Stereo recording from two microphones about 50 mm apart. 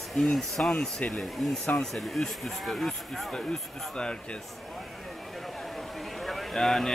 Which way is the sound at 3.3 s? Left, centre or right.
Centre.